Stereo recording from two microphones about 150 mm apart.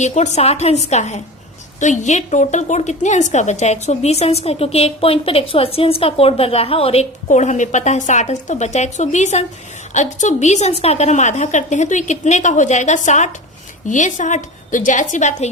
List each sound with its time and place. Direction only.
0.0 s a woman's voice: 50° left (ahead or behind)
7.3 s a woman's voice: 55° left (ahead or behind)